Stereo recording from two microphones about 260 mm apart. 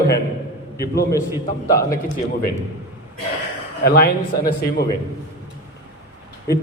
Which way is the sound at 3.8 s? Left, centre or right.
Left.